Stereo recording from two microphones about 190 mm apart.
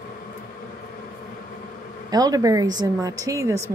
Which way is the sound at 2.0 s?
20° right (ahead or behind).